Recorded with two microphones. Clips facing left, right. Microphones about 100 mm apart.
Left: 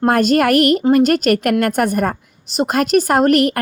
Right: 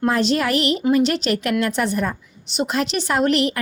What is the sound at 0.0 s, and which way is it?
A woman's voice, 50° left (ahead or behind).